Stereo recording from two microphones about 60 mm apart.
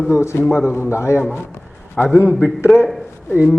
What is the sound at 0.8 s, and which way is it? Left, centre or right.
Speech, left.